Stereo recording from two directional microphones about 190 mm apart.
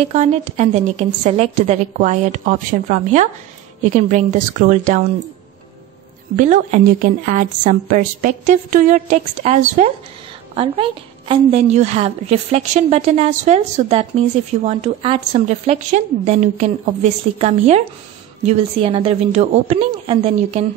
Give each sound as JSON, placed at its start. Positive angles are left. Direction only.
{"t": 0.0, "sound": "a woman's voice", "side_deg": -35}
{"t": 6.3, "sound": "a woman's voice", "side_deg": -40}